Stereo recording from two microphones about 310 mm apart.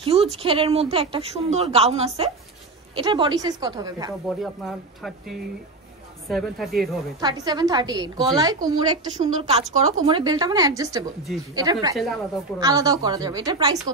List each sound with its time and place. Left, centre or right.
0.0 s a woman's voice: centre
4.4 s speech: centre
7.2 s a woman's voice: centre